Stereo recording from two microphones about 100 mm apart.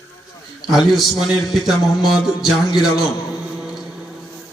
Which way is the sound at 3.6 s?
5° right (ahead or behind).